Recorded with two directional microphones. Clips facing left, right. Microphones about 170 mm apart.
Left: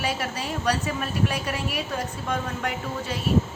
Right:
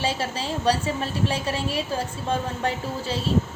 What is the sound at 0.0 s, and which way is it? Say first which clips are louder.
A woman's voice: right 2 dB; 30° right (ahead or behind).